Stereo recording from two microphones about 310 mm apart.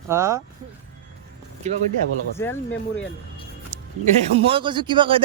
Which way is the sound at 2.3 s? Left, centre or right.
Centre.